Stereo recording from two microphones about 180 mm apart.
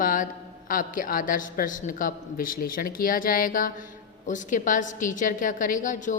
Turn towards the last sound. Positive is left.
turn(degrees=45)  # may be behind; listen again after turning